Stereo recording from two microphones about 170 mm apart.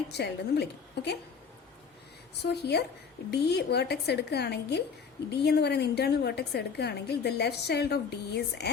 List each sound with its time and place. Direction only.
0.1 s a woman's voice: 75° left (ahead or behind)
2.4 s a woman's voice: 75° left (ahead or behind)